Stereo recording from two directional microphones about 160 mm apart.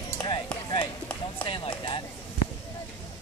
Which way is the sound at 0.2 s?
25° left (ahead or behind).